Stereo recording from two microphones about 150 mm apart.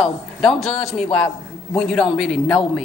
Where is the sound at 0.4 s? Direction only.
Centre (ahead or behind).